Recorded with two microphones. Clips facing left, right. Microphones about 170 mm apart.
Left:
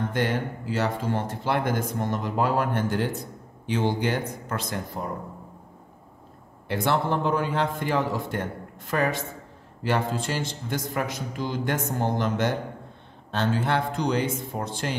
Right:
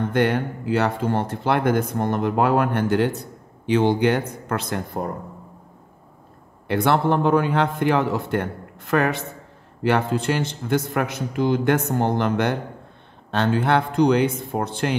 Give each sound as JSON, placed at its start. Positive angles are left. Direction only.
{"t": 0.1, "sound": "speech", "side_deg": -60}
{"t": 6.7, "sound": "speech", "side_deg": -60}